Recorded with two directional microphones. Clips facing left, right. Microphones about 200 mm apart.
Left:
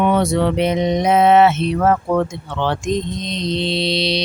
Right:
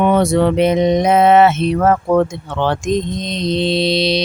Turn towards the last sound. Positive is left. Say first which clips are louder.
# right 4 dB
turn(degrees=-50)  # may be behind; listen again after turning